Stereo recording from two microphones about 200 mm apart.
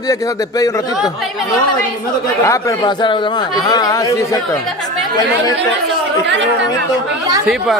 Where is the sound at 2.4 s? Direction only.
15° left (ahead or behind).